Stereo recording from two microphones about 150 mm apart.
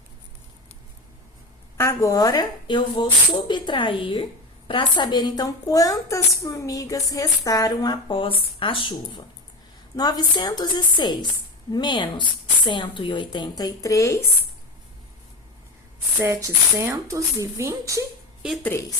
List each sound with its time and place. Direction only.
1.8 s a woman's voice: 20° left (ahead or behind)
16.2 s speech: 20° right (ahead or behind)